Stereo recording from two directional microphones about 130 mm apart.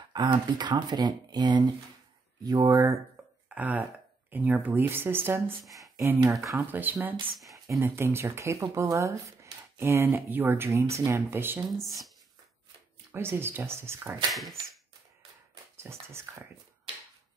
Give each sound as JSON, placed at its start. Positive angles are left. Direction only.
{"t": 0.1, "sound": "speech", "side_deg": -35}
{"t": 3.4, "sound": "speech", "side_deg": -10}
{"t": 11.8, "sound": "speech", "side_deg": 0}
{"t": 13.1, "sound": "speech", "side_deg": -20}
{"t": 15.7, "sound": "speech", "side_deg": -20}